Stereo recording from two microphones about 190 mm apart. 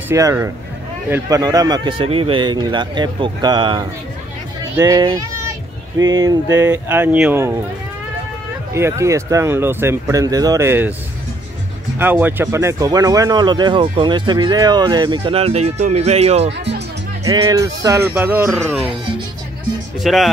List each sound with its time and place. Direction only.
0.1 s speech: 15° right (ahead or behind)
8.7 s speech: 15° right (ahead or behind)
12.0 s speech: 10° right (ahead or behind); by 16.5 s 35° right (ahead or behind)
17.2 s speech: 20° right (ahead or behind)
20.0 s speech: centre (ahead or behind)